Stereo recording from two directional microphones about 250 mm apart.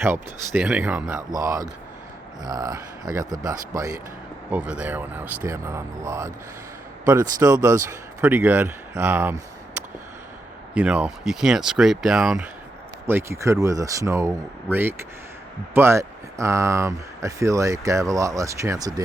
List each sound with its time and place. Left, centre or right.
0.0 s speech: centre
10.8 s speech: centre